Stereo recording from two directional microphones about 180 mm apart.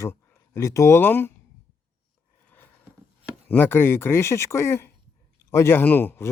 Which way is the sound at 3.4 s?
10° left (ahead or behind).